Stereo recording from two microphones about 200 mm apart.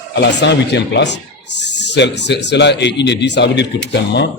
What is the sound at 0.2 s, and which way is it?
A man's voice, 60° left (ahead or behind).